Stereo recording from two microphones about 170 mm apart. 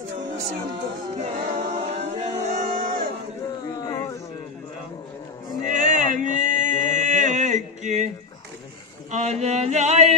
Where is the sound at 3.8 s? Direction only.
20° left (ahead or behind).